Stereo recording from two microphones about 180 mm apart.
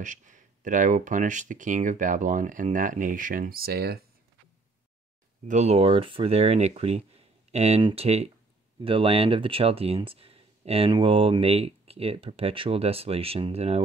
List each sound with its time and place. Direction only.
0.0 s speech: 45° right (ahead or behind); by 4.0 s 60° right (ahead or behind)
5.5 s speech: 40° right (ahead or behind)